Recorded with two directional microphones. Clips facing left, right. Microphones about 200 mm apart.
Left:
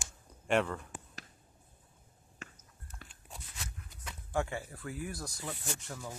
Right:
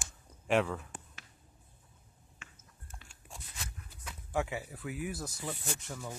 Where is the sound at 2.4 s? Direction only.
40° left (ahead or behind).